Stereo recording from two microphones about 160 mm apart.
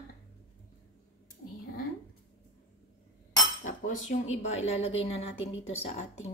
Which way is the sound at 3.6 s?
50° left (ahead or behind).